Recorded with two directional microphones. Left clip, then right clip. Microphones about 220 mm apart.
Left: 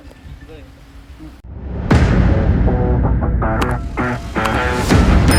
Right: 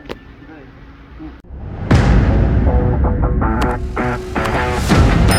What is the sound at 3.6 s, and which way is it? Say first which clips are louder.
Music: right 1 dB; centre (ahead or behind).